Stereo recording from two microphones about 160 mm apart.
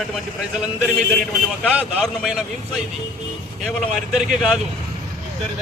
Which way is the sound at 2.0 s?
Centre (ahead or behind).